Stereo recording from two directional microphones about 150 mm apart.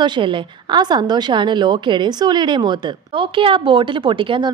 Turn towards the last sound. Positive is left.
turn(degrees=-35)  # may be behind; listen again after turning